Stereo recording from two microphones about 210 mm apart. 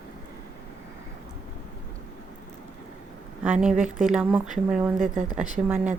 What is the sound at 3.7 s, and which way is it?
Speech, 35° right (ahead or behind).